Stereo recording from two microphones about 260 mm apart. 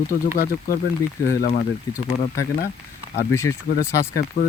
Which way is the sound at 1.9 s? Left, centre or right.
Centre.